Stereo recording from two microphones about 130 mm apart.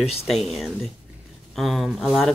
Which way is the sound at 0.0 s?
50° left (ahead or behind).